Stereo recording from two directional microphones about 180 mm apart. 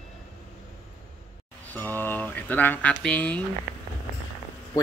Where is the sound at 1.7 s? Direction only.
10° left (ahead or behind).